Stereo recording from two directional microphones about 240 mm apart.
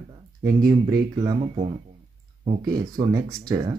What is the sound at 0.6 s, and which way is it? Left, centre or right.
Speech, centre.